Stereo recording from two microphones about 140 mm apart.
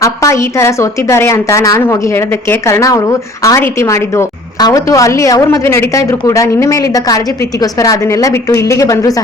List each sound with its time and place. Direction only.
0.0 s a woman's voice: 20° left (ahead or behind)